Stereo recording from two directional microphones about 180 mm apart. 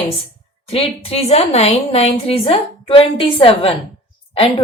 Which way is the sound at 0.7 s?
35° left (ahead or behind).